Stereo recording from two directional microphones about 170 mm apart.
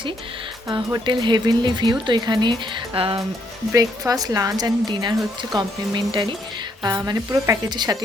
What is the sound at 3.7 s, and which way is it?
Speech, 20° right (ahead or behind).